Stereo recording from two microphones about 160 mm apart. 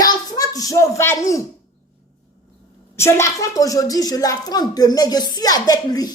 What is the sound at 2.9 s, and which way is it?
Speech, 15° left (ahead or behind).